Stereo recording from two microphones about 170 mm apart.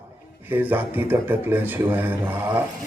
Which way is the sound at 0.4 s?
10° right (ahead or behind).